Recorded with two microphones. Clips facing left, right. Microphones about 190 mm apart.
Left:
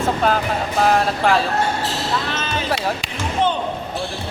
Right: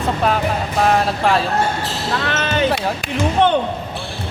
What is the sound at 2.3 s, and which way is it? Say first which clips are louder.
Basketball bounce: right 6 dB; 65° right (ahead or behind).